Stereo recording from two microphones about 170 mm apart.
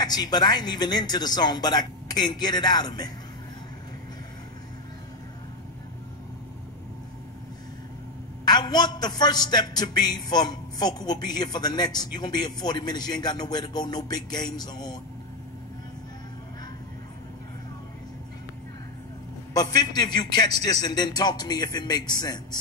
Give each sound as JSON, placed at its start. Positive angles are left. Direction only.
{"t": 0.0, "sound": "a man's voice", "side_deg": 25}
{"t": 8.5, "sound": "a man's voice", "side_deg": 25}
{"t": 19.5, "sound": "a man's voice", "side_deg": 25}